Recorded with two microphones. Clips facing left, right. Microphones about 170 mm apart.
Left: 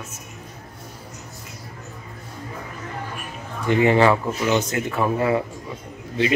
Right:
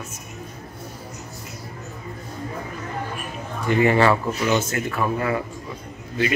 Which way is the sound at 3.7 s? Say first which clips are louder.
Left 1 dB; 20° left (ahead or behind).